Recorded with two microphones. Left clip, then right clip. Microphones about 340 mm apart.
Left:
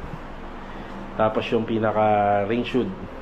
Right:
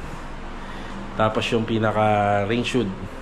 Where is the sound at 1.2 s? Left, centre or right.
Centre.